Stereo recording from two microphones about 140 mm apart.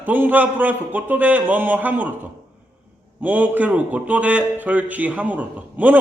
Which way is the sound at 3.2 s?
10° right (ahead or behind).